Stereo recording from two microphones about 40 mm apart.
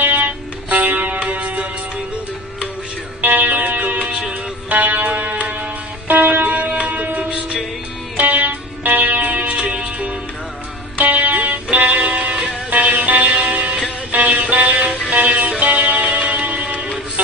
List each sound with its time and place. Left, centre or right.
0.0 s music: right
3.2 s music: right
6.4 s music: right
6.9 s music: right
7.2 s music: right
8.2 s music: right
9.2 s music: right
9.6 s music: right
11.0 s music: right
16.2 s music: right